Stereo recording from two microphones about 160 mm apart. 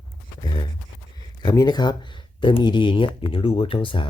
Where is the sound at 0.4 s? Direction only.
30° left (ahead or behind).